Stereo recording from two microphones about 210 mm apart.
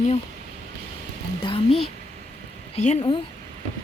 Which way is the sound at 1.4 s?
25° left (ahead or behind).